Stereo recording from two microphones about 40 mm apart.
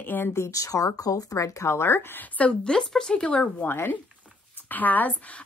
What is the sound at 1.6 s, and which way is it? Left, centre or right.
Speech, left.